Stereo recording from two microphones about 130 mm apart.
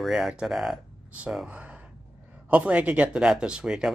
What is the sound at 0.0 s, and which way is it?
Speech, centre (ahead or behind).